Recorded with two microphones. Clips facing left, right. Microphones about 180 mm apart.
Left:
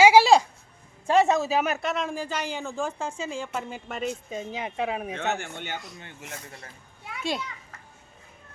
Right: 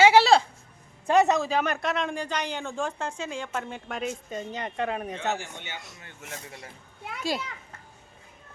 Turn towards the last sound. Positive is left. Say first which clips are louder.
# even
turn(degrees=0)  # may be behind; listen again after turning